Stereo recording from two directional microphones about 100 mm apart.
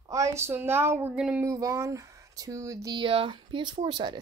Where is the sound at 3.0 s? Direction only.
60° right (ahead or behind).